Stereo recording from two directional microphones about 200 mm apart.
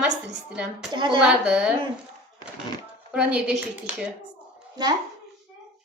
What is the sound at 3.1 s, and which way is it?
Speech, 5° right (ahead or behind).